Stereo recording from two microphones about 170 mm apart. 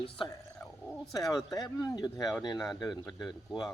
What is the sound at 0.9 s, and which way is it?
Bird, centre (ahead or behind).